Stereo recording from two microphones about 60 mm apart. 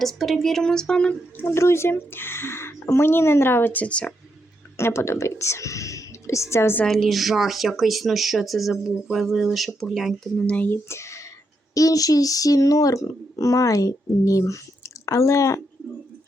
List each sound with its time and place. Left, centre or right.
0.0 s a woman's voice: centre
1.4 s speech: left
3.7 s a woman's voice: left
4.8 s speech: left
6.8 s speech: centre
10.4 s a woman's voice: centre
10.7 s speech: left
11.7 s speech: left